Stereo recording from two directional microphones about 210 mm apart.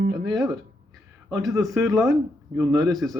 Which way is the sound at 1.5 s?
Centre (ahead or behind).